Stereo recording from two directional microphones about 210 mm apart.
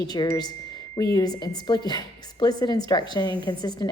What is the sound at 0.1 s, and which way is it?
A woman's voice, 20° left (ahead or behind).